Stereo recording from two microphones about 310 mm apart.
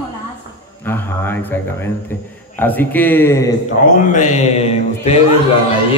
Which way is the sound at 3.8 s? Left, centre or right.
Left.